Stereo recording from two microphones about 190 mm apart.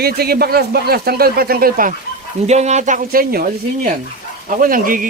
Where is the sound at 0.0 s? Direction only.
55° right (ahead or behind).